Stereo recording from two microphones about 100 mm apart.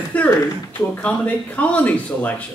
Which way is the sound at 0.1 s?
15° left (ahead or behind).